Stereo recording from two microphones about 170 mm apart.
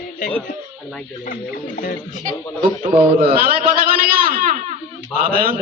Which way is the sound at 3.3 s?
60° right (ahead or behind).